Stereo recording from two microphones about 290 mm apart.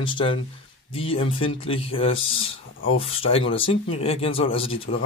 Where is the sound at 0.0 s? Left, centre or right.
Centre.